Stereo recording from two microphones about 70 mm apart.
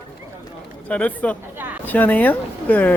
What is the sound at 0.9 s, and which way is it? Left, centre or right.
Speech, left.